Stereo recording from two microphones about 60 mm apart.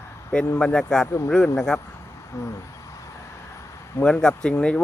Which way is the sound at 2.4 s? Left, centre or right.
Left.